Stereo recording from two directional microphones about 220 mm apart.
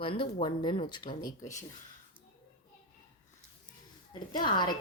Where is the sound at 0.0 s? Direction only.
25° left (ahead or behind).